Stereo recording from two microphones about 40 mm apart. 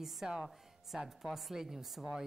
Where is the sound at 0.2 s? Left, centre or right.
Centre.